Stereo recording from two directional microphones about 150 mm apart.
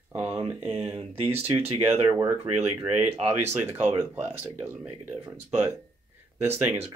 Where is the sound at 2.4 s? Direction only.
45° right (ahead or behind).